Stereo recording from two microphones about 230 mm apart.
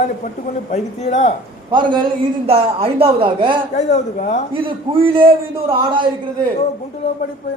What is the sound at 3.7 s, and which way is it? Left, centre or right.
Speech, left.